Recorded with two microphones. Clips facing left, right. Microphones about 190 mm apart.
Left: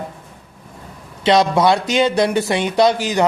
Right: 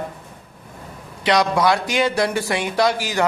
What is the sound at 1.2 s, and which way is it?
Speech, 25° left (ahead or behind).